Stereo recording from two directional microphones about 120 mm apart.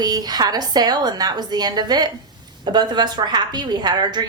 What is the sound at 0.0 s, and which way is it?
A woman's voice, 35° right (ahead or behind).